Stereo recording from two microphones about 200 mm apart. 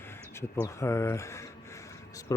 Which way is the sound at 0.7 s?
15° left (ahead or behind).